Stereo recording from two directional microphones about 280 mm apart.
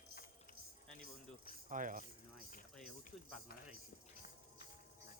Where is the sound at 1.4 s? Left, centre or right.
Right.